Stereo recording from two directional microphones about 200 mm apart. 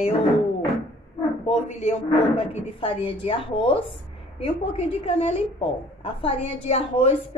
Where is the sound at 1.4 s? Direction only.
30° left (ahead or behind).